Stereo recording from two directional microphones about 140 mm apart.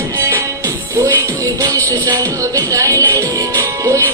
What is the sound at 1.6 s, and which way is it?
Music, 25° right (ahead or behind).